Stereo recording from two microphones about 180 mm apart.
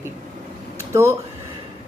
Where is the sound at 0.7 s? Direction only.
15° right (ahead or behind).